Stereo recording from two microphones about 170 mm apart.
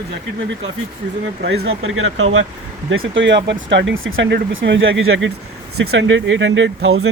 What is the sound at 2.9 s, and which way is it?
Speech, 90° right.